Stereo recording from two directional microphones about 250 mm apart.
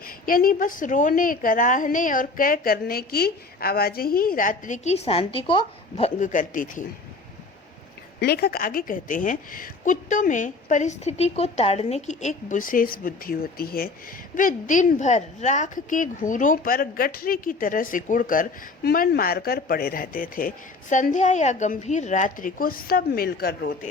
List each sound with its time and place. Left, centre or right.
0.0 s a woman's voice: left
8.2 s a woman's voice: left